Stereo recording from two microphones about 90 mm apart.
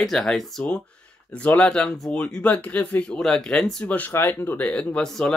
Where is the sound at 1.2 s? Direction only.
15° left (ahead or behind).